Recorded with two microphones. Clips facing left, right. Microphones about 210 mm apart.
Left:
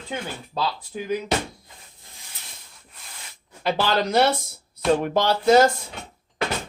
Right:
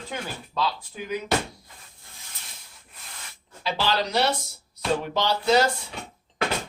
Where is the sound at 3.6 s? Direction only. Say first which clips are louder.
Left 4 dB; 50° left (ahead or behind).